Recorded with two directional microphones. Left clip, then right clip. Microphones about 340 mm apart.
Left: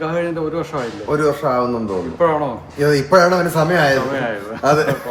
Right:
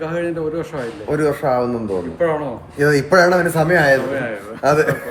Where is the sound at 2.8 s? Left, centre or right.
Centre.